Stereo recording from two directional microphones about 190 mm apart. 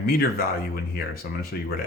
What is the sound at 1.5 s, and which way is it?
Speech, 55° left (ahead or behind).